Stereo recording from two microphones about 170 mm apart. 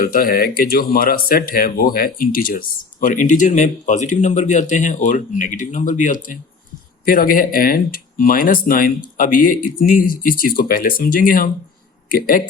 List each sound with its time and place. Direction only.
0.1 s speech: 60° left (ahead or behind)